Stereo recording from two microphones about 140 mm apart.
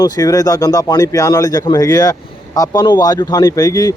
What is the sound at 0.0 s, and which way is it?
Speech, 25° left (ahead or behind).